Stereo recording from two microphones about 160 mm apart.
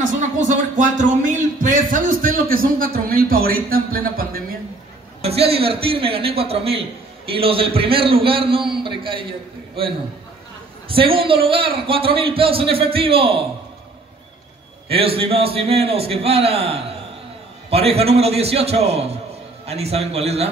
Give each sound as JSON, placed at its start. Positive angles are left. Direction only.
{"t": 0.4, "sound": "a sound", "side_deg": -50}
{"t": 5.2, "sound": "a man's voice", "side_deg": -40}
{"t": 10.9, "sound": "a man's voice", "side_deg": -35}
{"t": 14.9, "sound": "a man's voice", "side_deg": -35}